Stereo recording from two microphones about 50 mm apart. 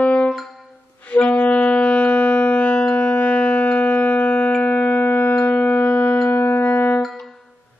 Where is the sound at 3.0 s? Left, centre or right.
Left.